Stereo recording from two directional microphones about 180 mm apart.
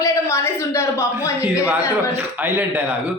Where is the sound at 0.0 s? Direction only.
15° left (ahead or behind).